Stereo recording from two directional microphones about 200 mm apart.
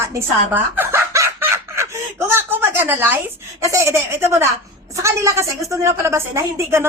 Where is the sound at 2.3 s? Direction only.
10° right (ahead or behind).